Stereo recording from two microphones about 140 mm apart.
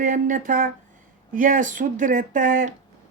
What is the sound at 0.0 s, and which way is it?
Speech, 70° right (ahead or behind).